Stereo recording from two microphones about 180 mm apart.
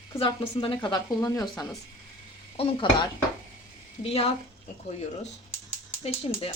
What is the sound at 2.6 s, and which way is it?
A woman's voice, 30° left (ahead or behind).